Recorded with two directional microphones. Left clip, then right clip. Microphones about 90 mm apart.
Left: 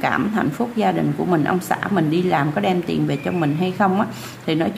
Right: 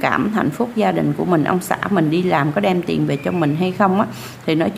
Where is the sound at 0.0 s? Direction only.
35° right (ahead or behind).